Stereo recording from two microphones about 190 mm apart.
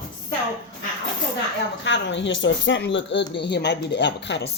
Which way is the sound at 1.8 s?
75° left (ahead or behind).